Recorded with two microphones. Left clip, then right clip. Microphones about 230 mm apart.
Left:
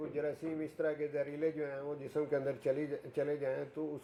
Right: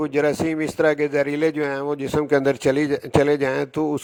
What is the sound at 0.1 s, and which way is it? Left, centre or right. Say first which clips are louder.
Speech: right 16 dB; right.